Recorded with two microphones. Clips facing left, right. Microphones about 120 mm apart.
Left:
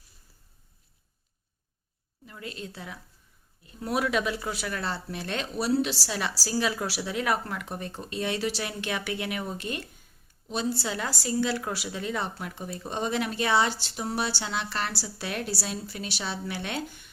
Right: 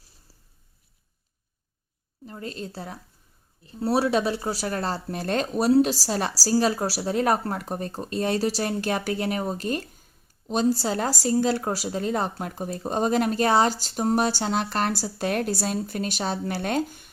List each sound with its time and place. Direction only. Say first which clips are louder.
2.2 s a woman's voice: right 5 dB; 35° right (ahead or behind)